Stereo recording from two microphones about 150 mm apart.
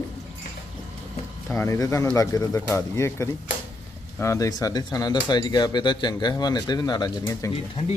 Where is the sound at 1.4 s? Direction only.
20° left (ahead or behind).